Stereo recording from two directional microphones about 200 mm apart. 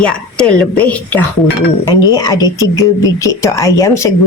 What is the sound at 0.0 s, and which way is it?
A woman's voice, 5° left (ahead or behind).